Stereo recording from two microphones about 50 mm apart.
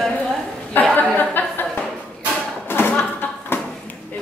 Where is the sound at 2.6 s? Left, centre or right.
Left.